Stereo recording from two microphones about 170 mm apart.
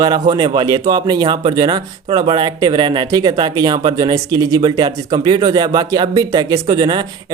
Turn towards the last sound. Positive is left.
turn(degrees=-25)  # may be behind; listen again after turning